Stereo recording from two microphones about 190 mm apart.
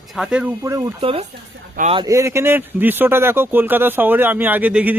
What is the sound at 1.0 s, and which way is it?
Speech, 30° right (ahead or behind).